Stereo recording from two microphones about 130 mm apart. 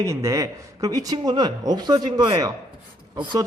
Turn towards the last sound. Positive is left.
turn(degrees=-35)  # may be behind; listen again after turning